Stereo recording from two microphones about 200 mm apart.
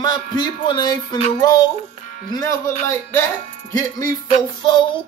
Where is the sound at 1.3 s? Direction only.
20° left (ahead or behind).